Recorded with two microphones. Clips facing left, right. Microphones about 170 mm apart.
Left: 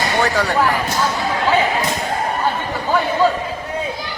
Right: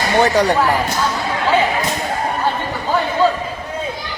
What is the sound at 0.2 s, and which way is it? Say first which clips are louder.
Speech: right 6 dB; 20° right (ahead or behind).